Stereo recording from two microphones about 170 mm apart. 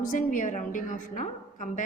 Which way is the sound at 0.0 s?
50° left (ahead or behind).